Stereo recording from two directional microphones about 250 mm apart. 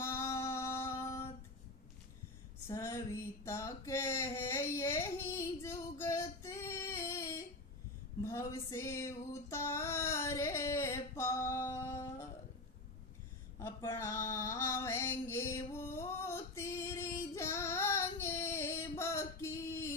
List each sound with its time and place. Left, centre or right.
0.0 s music: centre
2.6 s child singing: centre
8.2 s female singing: centre
13.6 s a sound: centre